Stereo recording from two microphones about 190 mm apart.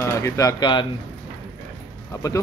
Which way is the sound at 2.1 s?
15° left (ahead or behind).